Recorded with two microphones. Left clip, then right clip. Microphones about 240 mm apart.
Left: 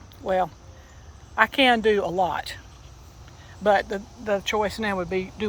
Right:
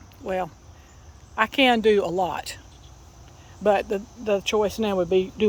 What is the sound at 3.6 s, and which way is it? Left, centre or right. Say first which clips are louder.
Speech: even; right.